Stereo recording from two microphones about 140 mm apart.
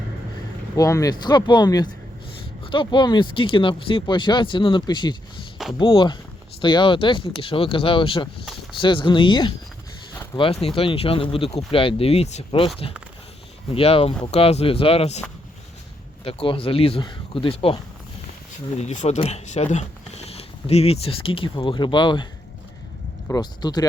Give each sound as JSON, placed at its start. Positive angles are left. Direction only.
{"t": 0.8, "sound": "speech", "side_deg": 25}
{"t": 16.2, "sound": "speech", "side_deg": 40}
{"t": 18.8, "sound": "speech", "side_deg": 55}
{"t": 23.3, "sound": "speech", "side_deg": 30}